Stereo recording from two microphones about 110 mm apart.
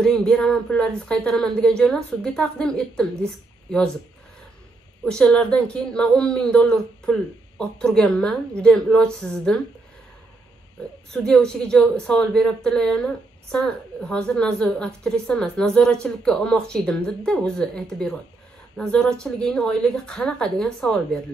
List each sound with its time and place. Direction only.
0.0 s speech: 5° left (ahead or behind)
5.0 s speech: 10° left (ahead or behind)
10.8 s speech: 10° left (ahead or behind)